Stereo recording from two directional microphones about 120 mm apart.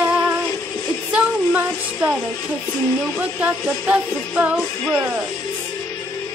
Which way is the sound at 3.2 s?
10° right (ahead or behind).